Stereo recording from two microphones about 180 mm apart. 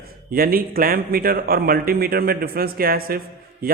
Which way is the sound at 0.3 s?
55° right (ahead or behind).